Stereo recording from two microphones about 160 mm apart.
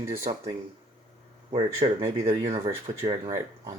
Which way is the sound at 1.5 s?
40° right (ahead or behind).